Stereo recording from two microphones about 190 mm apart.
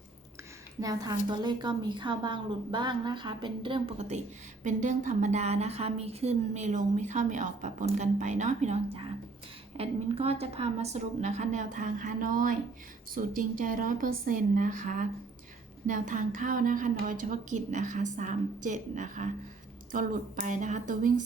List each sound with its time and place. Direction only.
0.8 s a woman's voice: 20° right (ahead or behind); by 21.1 s 40° right (ahead or behind)